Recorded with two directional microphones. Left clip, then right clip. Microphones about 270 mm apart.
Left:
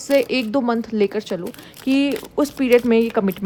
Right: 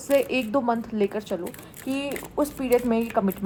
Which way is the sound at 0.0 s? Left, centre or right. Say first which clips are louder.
Left 4 dB; left.